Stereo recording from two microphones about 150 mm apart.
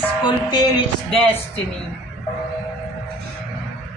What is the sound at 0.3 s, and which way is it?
Music, 30° left (ahead or behind).